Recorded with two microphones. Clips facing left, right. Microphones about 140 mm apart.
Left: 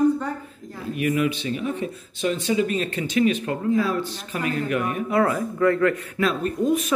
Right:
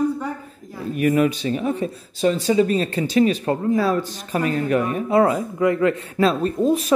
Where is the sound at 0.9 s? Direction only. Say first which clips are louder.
Right 4 dB; 40° right (ahead or behind).